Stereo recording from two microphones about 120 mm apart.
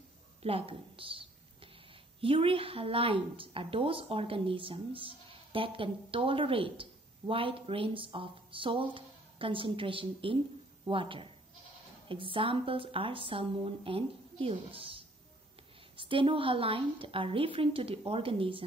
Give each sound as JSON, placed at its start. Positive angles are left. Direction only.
{"t": 0.4, "sound": "a woman's voice", "side_deg": -55}